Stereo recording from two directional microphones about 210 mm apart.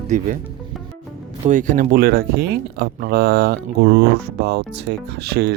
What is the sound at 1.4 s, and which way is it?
Speech, 35° right (ahead or behind).